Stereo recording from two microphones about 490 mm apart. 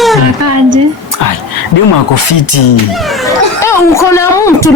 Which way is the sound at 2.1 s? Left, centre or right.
Left.